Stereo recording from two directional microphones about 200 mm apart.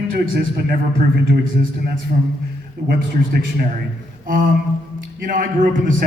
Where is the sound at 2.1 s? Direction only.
40° right (ahead or behind).